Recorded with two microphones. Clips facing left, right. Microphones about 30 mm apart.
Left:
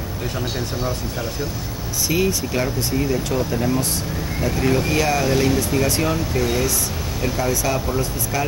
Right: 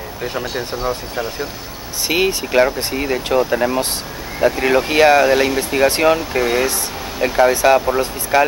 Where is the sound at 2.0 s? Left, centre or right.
Right.